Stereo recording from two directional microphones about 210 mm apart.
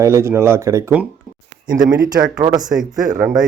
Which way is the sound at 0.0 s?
15° right (ahead or behind).